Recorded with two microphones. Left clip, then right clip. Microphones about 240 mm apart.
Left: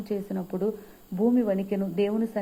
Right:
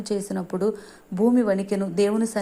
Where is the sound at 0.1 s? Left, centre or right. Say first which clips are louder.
Right 4 dB; right.